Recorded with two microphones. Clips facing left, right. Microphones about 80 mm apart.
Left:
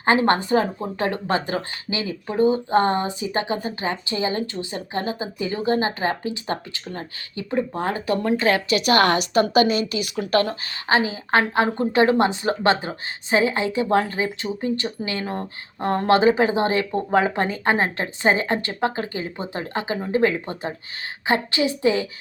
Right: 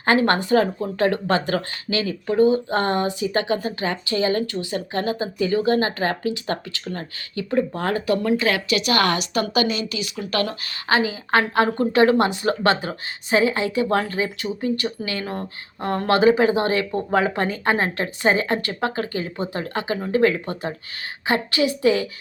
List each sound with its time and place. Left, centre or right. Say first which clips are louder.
0.0 s a woman's voice: even; left
10.4 s speech: even; left